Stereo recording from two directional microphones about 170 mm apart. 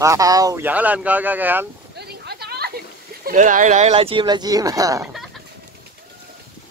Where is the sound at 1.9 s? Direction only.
70° right (ahead or behind).